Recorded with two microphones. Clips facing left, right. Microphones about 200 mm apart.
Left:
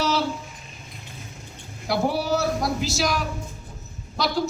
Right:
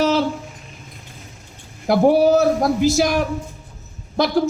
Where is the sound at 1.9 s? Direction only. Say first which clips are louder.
Right 10 dB; 50° right (ahead or behind).